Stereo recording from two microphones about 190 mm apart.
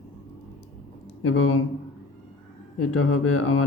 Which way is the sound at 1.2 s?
90° left.